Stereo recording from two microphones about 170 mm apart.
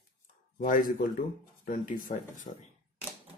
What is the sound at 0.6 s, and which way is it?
Speech, 55° left (ahead or behind).